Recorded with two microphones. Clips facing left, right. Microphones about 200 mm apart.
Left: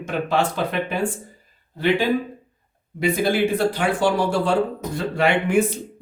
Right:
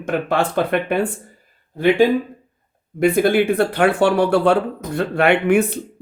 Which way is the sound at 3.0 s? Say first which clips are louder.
Right 5 dB; 55° right (ahead or behind).